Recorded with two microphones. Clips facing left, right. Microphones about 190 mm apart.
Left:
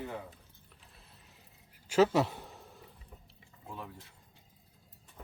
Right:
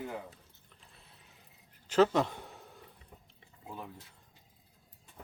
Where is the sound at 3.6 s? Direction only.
15° right (ahead or behind).